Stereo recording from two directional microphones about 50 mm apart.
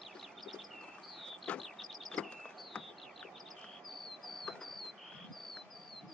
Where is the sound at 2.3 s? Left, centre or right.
Centre.